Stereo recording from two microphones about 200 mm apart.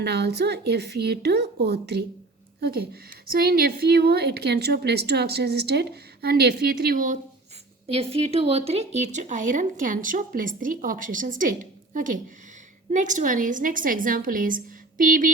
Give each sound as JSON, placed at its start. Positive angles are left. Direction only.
{"t": 0.0, "sound": "speech", "side_deg": -55}
{"t": 7.9, "sound": "speech", "side_deg": -30}